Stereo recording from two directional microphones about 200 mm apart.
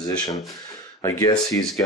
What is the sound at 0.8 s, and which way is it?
Speech, 15° left (ahead or behind).